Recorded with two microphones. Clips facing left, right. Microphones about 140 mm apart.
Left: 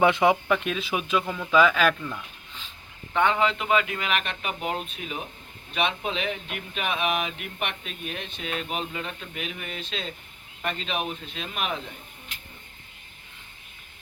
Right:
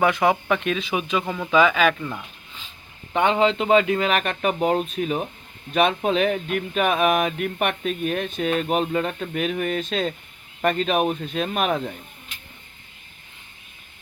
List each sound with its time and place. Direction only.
0.0 s speech: 20° left (ahead or behind)
0.4 s speech: centre (ahead or behind)
3.1 s speech: 25° right (ahead or behind); by 11.8 s 45° right (ahead or behind)